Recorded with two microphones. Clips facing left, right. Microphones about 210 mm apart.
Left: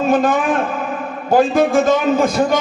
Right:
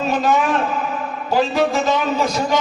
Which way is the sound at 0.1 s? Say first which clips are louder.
Left 1 dB; 50° left (ahead or behind).